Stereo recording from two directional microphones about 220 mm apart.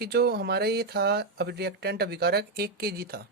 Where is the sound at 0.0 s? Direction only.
45° right (ahead or behind).